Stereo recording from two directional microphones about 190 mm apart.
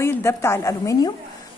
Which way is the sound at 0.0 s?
15° left (ahead or behind).